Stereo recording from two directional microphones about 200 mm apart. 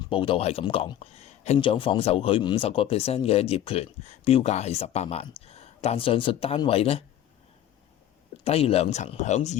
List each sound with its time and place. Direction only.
0.1 s speech: 25° left (ahead or behind)
8.4 s speech: 30° left (ahead or behind)